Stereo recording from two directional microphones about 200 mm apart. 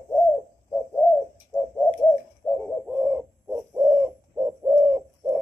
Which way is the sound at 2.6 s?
5° right (ahead or behind).